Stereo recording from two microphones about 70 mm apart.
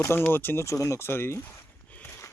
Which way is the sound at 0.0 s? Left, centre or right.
Left.